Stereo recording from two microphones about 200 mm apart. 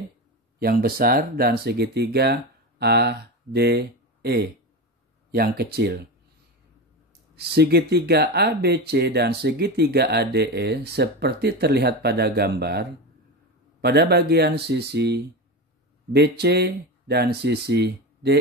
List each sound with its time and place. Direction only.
0.6 s speech: 50° right (ahead or behind)
7.3 s speech: 55° right (ahead or behind)